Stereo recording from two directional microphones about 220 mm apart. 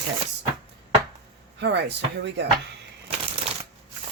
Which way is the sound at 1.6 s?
50° right (ahead or behind).